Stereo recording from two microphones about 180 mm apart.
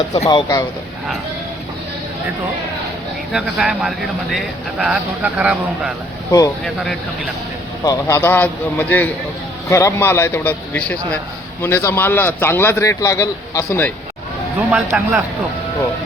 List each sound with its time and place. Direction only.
0.3 s speech: 20° left (ahead or behind)
3.3 s speech: 5° right (ahead or behind)
7.9 s a man's voice: 15° left (ahead or behind)
14.7 s a man's voice: 5° right (ahead or behind)